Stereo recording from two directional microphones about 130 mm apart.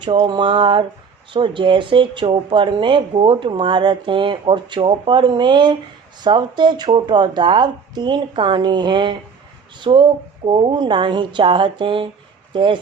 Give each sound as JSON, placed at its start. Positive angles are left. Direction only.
{"t": 0.0, "sound": "speech", "side_deg": -35}